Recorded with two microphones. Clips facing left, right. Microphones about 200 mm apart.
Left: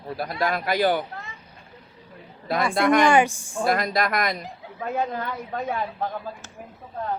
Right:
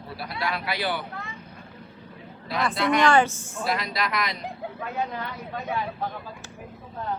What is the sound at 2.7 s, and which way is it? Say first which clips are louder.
Speech: left 5 dB; 50° left (ahead or behind).